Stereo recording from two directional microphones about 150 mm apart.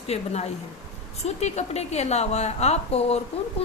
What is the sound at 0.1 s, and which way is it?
A woman's voice, 45° left (ahead or behind).